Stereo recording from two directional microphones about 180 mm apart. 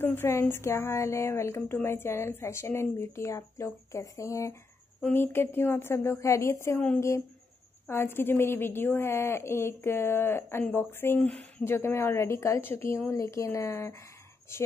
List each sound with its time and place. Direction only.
0.0 s a woman's voice: 15° left (ahead or behind)
7.8 s a woman's voice: 15° left (ahead or behind)